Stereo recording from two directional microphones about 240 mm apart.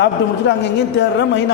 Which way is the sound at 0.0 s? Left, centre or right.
Left.